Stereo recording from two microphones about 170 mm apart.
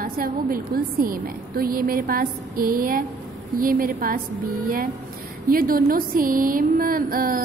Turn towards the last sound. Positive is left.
turn(degrees=-55)  # may be behind; listen again after turning